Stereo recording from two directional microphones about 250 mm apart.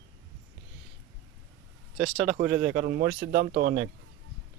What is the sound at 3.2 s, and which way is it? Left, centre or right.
Speech, right.